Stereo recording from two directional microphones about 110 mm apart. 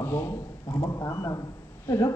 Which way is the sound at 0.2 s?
35° left (ahead or behind).